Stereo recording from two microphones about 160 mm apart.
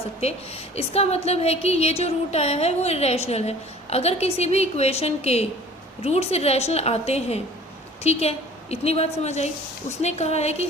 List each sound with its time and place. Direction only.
0.2 s a woman's voice: 40° left (ahead or behind)